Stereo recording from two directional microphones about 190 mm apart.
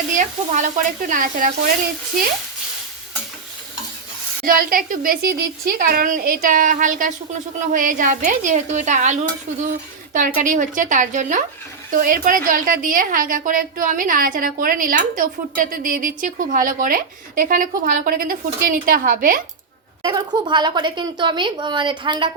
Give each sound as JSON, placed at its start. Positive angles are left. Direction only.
{"t": 0.1, "sound": "a woman's voice", "side_deg": -40}
{"t": 4.4, "sound": "a woman's voice", "side_deg": -50}
{"t": 20.0, "sound": "a woman's voice", "side_deg": -20}